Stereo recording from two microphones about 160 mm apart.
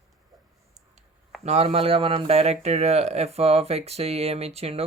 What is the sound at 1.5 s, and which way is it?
Speech, 40° right (ahead or behind).